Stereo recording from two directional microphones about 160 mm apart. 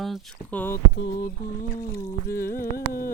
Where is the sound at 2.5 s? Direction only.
65° left (ahead or behind).